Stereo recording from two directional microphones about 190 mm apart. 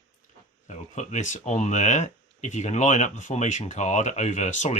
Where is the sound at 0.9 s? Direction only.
40° left (ahead or behind).